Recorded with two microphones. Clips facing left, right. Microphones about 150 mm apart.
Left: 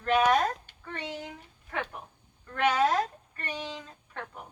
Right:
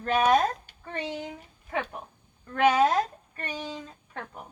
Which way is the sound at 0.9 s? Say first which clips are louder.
Right 4 dB; 20° right (ahead or behind).